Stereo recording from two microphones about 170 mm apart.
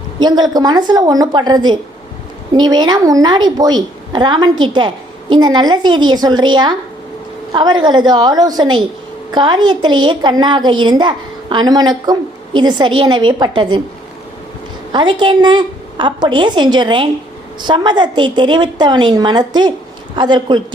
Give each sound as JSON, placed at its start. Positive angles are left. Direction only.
{"t": 0.2, "sound": "a woman's voice", "side_deg": -25}
{"t": 14.9, "sound": "a woman's voice", "side_deg": -30}